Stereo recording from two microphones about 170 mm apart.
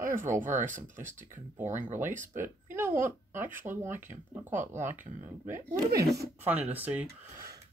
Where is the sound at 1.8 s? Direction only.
10° right (ahead or behind).